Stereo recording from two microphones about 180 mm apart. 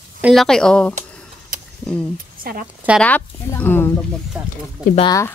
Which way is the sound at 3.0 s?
10° left (ahead or behind).